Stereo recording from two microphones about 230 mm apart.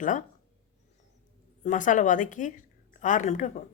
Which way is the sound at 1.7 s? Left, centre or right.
Left.